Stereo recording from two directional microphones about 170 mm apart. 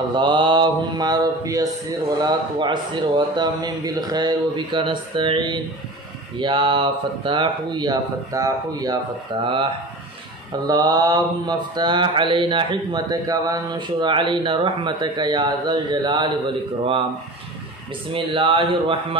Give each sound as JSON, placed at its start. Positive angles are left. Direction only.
{"t": 0.1, "sound": "mantra", "side_deg": -25}
{"t": 10.7, "sound": "mantra", "side_deg": -25}
{"t": 18.1, "sound": "speech", "side_deg": -30}